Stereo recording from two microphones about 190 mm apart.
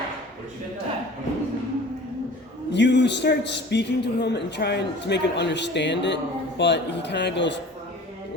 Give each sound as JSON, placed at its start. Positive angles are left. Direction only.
{"t": 2.7, "sound": "a man's voice", "side_deg": 65}